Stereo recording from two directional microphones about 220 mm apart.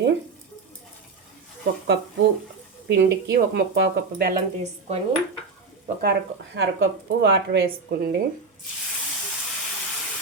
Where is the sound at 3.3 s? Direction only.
50° right (ahead or behind).